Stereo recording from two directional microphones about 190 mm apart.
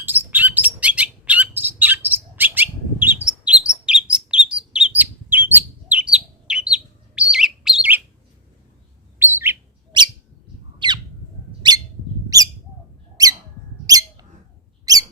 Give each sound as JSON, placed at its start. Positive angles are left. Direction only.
{"t": 0.0, "sound": "bird", "side_deg": -10}
{"t": 9.1, "sound": "bird", "side_deg": -10}
{"t": 9.9, "sound": "bird", "side_deg": -25}
{"t": 13.2, "sound": "a sound", "side_deg": -20}
{"t": 14.9, "sound": "squeak", "side_deg": -20}